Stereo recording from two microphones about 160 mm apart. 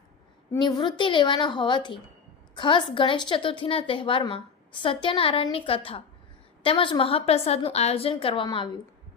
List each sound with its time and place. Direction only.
0.6 s a woman's voice: 30° left (ahead or behind)